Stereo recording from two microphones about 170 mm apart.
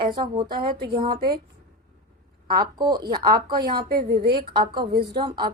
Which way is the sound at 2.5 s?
25° right (ahead or behind).